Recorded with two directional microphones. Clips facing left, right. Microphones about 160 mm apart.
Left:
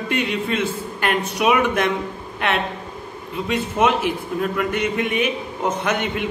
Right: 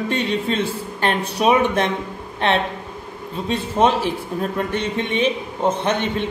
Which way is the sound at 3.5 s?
30° right (ahead or behind).